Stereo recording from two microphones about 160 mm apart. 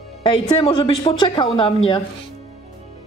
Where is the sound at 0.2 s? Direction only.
30° left (ahead or behind).